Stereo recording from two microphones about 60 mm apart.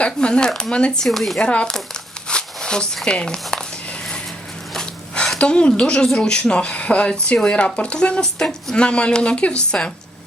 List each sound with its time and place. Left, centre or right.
0.0 s speech: centre
1.0 s speech: centre
1.4 s crumpling: centre
5.4 s speech: centre